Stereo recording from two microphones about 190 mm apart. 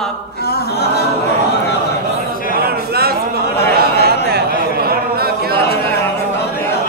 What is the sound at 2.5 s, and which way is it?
Speech, 55° right (ahead or behind).